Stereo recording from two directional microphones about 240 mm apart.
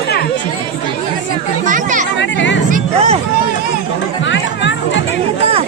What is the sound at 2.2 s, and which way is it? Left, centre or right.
Chatter, left.